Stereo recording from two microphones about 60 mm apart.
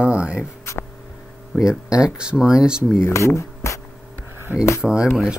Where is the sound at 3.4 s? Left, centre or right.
Left.